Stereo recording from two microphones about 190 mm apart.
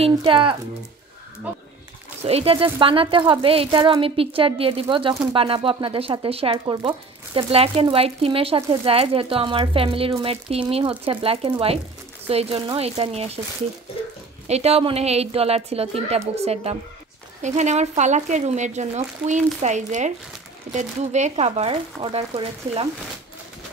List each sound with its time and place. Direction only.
0.0 s speech: 30° right (ahead or behind)
2.2 s speech: 30° right (ahead or behind)
14.5 s speech: 35° right (ahead or behind)